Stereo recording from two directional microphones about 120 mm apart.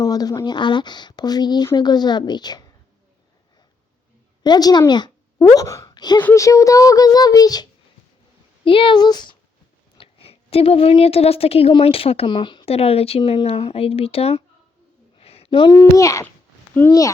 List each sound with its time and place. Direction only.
0.0 s speech: 30° left (ahead or behind)
4.4 s speech: 35° left (ahead or behind)
8.6 s speech: 45° left (ahead or behind)
10.0 s a woman's voice: 55° left (ahead or behind)
12.6 s speech: 55° left (ahead or behind)
15.2 s a sound: 55° left (ahead or behind)
15.7 s a child's voice: 25° left (ahead or behind)